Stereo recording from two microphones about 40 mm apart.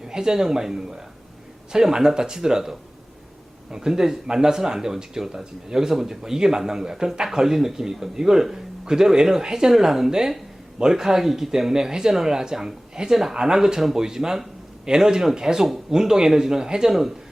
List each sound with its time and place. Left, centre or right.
0.0 s speech: centre